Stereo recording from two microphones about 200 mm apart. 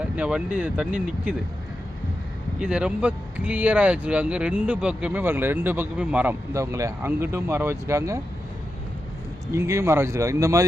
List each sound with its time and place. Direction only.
0.2 s speech: 5° right (ahead or behind)
2.6 s speech: 5° right (ahead or behind)
9.5 s speech: 15° right (ahead or behind)